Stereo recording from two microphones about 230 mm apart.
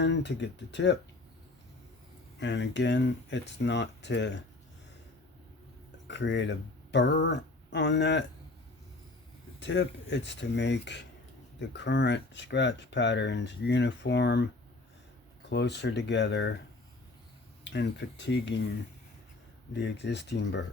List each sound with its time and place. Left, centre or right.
0.0 s speech: left
2.4 s speech: left
6.1 s speech: left
9.6 s speech: left
15.4 s speech: left
17.6 s speech: left
19.7 s speech: left